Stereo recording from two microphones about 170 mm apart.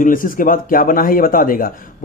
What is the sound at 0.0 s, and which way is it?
A man's voice, 55° left (ahead or behind).